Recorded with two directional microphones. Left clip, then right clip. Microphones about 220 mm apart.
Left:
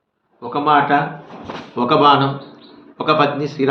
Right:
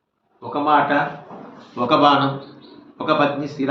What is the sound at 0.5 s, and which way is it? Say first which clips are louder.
A man's voice: left 3 dB; 50° left (ahead or behind).